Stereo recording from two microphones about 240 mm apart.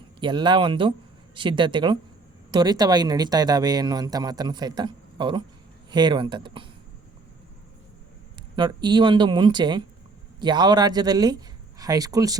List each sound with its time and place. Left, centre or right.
0.2 s speech: centre
8.5 s speech: centre